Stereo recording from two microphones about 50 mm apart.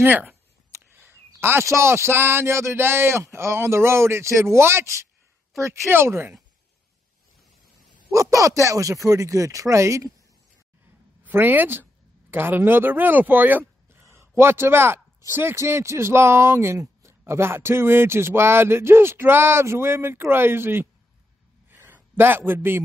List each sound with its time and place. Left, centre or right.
0.0 s speech: right
0.9 s a sound: right
1.7 s speech: right
8.1 s speech: right
11.2 s speech: right
14.2 s a man's voice: right
17.3 s speech: right
21.6 s a sound: right